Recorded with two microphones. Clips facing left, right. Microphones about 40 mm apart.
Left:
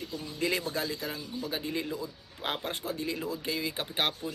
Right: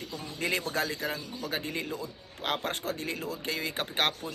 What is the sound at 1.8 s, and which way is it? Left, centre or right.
Speech, right.